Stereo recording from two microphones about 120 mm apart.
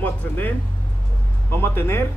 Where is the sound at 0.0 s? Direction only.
15° left (ahead or behind).